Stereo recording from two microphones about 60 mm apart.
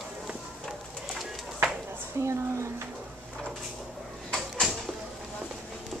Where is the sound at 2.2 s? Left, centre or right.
Right.